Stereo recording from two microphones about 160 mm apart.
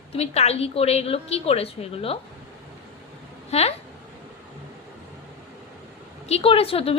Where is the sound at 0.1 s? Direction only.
40° left (ahead or behind).